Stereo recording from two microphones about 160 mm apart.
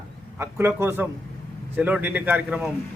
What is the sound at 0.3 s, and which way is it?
Speech, 15° right (ahead or behind).